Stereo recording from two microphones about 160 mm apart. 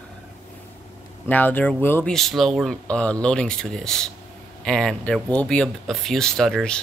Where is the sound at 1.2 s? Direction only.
10° left (ahead or behind).